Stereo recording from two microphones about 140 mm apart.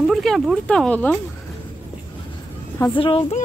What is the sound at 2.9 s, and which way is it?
Speech, 40° left (ahead or behind).